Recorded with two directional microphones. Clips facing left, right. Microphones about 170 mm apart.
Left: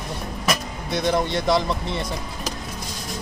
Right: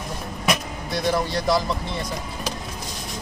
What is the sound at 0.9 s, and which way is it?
Speech, 20° left (ahead or behind).